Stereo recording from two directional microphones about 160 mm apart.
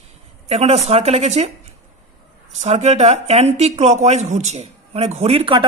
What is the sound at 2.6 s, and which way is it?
Speech, 45° right (ahead or behind).